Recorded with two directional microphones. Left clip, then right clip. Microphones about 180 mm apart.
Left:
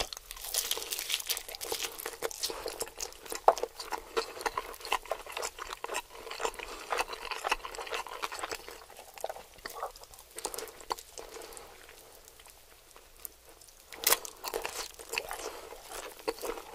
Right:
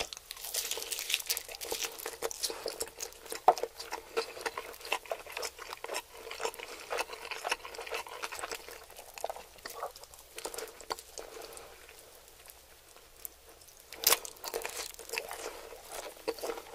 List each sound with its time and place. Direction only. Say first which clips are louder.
0.0 s crunch: left 2 dB; 35° left (ahead or behind)
3.5 s patter: left 2 dB; 35° left (ahead or behind)
10.3 s a sound: left 1 dB; 30° left (ahead or behind)
13.9 s crunch: even; 30° left (ahead or behind)
16.0 s patter: left 1 dB; 30° left (ahead or behind)